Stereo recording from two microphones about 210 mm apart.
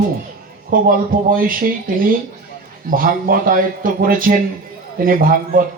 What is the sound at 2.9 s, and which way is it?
Speech, 40° right (ahead or behind).